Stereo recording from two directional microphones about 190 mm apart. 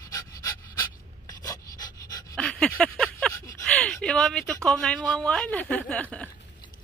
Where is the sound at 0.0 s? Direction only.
20° left (ahead or behind).